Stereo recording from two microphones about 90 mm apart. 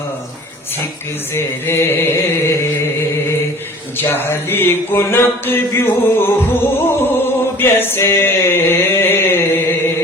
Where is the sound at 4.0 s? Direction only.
25° left (ahead or behind).